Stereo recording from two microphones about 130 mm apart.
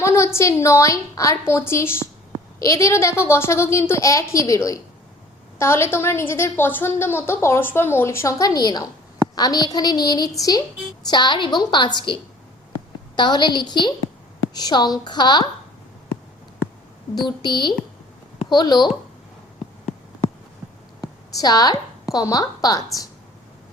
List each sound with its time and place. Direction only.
0.0 s a woman's voice: 20° left (ahead or behind)
17.2 s a woman's voice: 35° left (ahead or behind)
21.0 s a sound: 30° left (ahead or behind)
22.1 s a woman's voice: 25° left (ahead or behind)